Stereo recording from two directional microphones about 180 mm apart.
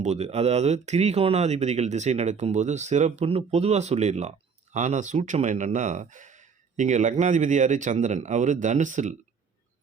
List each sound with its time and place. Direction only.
0.0 s speech: 35° right (ahead or behind)